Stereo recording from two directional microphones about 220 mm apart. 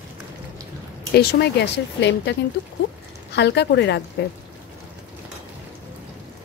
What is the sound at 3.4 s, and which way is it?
Speech, 50° left (ahead or behind).